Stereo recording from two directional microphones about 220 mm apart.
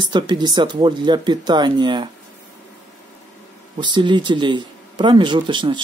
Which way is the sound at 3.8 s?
20° right (ahead or behind).